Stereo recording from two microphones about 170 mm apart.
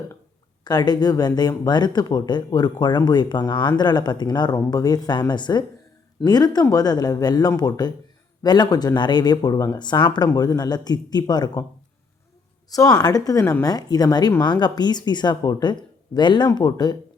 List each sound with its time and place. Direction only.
0.6 s speech: 25° left (ahead or behind)
12.7 s speech: 20° left (ahead or behind)